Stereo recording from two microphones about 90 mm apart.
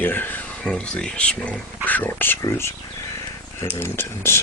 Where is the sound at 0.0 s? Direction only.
20° left (ahead or behind).